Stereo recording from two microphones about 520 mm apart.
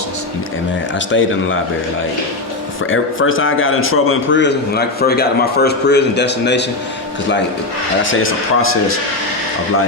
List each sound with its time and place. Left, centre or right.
0.9 s a man's voice: left
2.9 s a man's voice: left
8.0 s a man's voice: left